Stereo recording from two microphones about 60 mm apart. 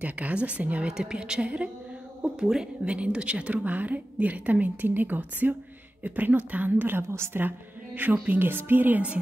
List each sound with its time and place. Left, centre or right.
0.0 s a woman's voice: right
7.1 s a woman's voice: right
7.4 s a woman's voice: right